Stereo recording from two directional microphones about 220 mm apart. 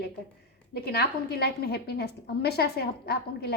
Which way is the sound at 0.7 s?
45° left (ahead or behind).